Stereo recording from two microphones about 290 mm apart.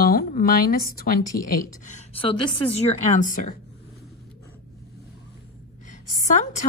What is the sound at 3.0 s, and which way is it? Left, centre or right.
Speech, left.